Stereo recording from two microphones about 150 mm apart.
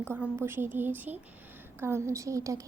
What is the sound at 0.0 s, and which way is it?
A woman's voice, 15° right (ahead or behind).